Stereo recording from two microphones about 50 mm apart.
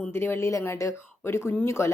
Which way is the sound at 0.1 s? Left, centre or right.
Left.